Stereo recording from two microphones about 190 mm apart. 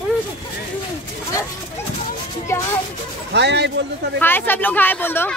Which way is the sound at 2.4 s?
15° left (ahead or behind).